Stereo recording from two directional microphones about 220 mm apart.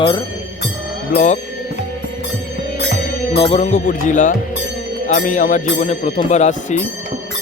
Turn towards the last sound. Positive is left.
turn(degrees=35)  # may be behind; listen again after turning